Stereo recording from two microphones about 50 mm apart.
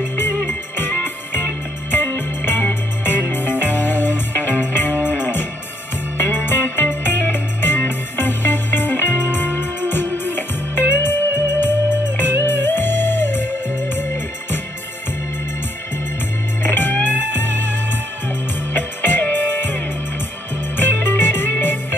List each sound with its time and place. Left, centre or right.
0.0 s music: left
16.7 s music: left
18.8 s music: left